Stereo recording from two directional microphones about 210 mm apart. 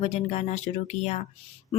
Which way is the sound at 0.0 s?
35° left (ahead or behind).